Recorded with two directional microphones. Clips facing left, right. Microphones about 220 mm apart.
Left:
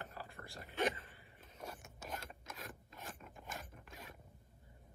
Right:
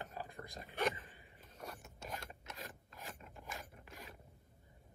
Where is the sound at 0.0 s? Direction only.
15° right (ahead or behind).